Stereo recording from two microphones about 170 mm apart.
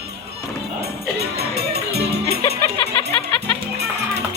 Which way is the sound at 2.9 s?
30° left (ahead or behind).